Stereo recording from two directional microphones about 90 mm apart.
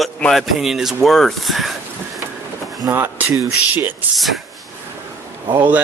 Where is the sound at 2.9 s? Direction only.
25° right (ahead or behind).